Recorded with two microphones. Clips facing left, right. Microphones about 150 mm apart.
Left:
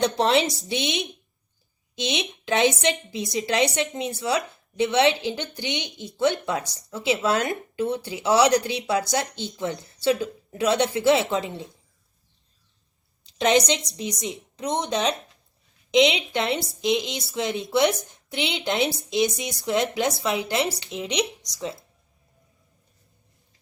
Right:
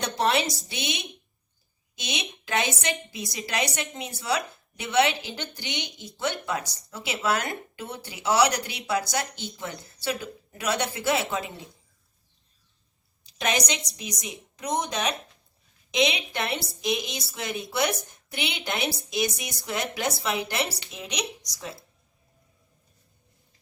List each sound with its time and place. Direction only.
0.0 s speech: 25° left (ahead or behind)
13.2 s speech: 25° left (ahead or behind)